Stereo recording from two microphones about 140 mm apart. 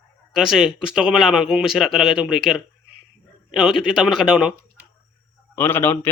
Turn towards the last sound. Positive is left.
turn(degrees=15)  # may be behind; listen again after turning